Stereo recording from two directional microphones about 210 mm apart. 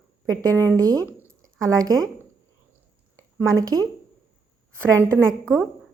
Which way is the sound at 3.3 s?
15° right (ahead or behind).